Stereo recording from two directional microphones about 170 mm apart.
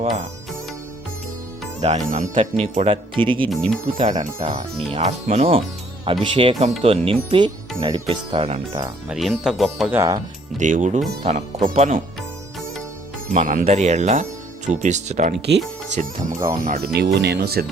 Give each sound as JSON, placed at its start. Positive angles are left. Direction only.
{"t": 1.8, "sound": "speech", "side_deg": -40}
{"t": 3.4, "sound": "speech", "side_deg": 5}
{"t": 3.9, "sound": "speech", "side_deg": -35}
{"t": 9.0, "sound": "speech", "side_deg": 0}
{"t": 9.9, "sound": "speech", "side_deg": -15}
{"t": 10.6, "sound": "speech", "side_deg": -50}
{"t": 13.3, "sound": "speech", "side_deg": -50}
{"t": 15.4, "sound": "speech", "side_deg": -80}
{"t": 16.6, "sound": "speech", "side_deg": -60}